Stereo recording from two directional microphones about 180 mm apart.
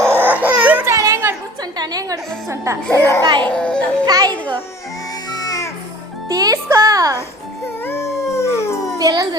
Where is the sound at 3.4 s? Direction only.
5° left (ahead or behind).